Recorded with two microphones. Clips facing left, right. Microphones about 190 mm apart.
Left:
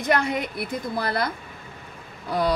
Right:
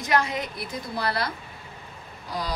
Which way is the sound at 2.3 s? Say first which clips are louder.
Left 8 dB; 60° left (ahead or behind).